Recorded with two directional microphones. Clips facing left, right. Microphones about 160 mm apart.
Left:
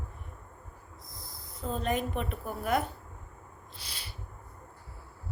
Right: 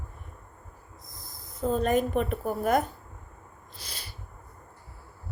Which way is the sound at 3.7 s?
40° right (ahead or behind).